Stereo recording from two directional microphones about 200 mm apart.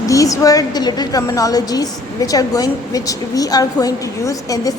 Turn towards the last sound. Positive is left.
turn(degrees=15)  # may be behind; listen again after turning